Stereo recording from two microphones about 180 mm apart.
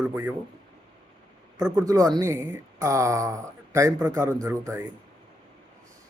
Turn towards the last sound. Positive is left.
turn(degrees=-15)  # may be behind; listen again after turning